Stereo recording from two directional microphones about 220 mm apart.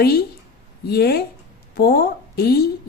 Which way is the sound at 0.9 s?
45° left (ahead or behind).